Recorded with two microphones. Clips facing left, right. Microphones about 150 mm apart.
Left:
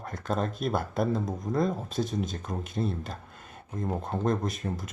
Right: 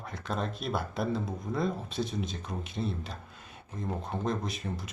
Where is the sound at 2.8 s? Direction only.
45° left (ahead or behind).